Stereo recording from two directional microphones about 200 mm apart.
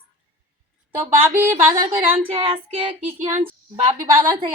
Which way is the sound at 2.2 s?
25° right (ahead or behind).